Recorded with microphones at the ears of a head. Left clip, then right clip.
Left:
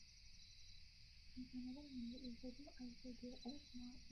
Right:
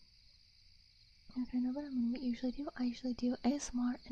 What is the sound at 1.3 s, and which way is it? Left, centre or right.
Speech, right.